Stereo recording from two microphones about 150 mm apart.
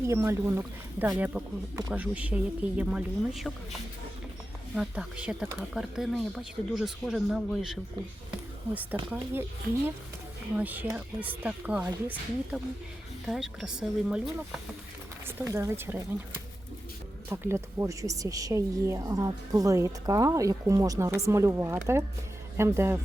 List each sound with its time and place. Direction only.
0.1 s speech: 15° right (ahead or behind)
4.7 s speech: 5° right (ahead or behind)
15.3 s speech: 15° right (ahead or behind)
17.2 s speech: 15° right (ahead or behind)